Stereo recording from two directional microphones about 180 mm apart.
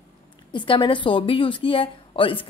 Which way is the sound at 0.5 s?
25° left (ahead or behind).